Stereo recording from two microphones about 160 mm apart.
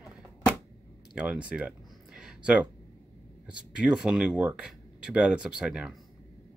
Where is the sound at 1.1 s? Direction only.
5° right (ahead or behind).